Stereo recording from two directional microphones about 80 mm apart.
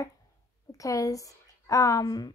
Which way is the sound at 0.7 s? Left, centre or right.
Left.